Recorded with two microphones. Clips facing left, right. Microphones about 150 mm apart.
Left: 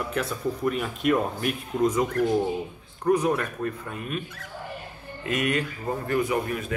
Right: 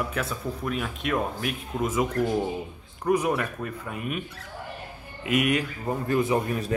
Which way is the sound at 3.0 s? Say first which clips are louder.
Left 1 dB; 10° right (ahead or behind).